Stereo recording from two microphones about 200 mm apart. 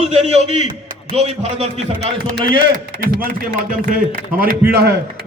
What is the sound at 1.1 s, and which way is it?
Speech, 35° right (ahead or behind).